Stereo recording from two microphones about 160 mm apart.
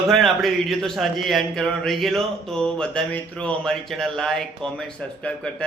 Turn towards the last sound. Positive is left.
turn(degrees=5)  # may be behind; listen again after turning